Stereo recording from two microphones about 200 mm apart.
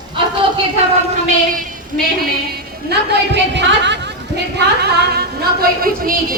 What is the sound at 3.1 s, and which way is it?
A woman's voice, 60° right (ahead or behind).